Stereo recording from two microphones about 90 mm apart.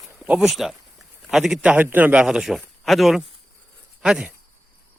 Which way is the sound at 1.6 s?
15° right (ahead or behind).